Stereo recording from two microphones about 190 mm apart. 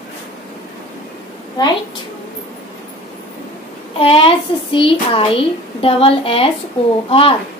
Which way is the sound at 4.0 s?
30° left (ahead or behind).